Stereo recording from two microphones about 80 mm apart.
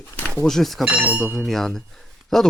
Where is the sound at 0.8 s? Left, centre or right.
Centre.